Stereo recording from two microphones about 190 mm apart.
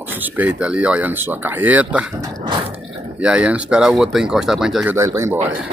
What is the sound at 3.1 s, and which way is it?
Speech, 5° right (ahead or behind).